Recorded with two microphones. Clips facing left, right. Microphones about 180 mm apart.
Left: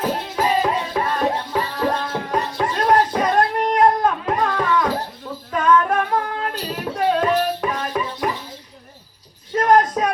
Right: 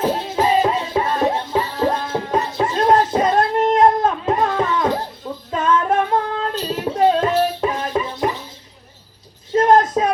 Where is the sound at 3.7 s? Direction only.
25° right (ahead or behind).